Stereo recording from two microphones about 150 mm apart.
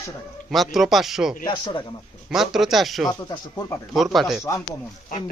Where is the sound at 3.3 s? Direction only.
20° left (ahead or behind).